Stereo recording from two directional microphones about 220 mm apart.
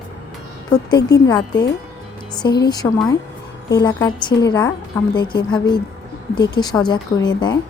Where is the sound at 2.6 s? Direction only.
20° left (ahead or behind).